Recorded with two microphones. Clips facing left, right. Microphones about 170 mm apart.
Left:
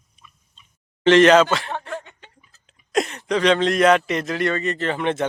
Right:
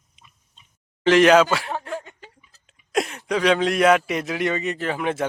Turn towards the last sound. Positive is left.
turn(degrees=-5)  # may be behind; listen again after turning